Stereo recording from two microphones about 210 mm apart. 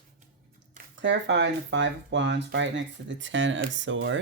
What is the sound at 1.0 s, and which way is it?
Speech, 60° right (ahead or behind).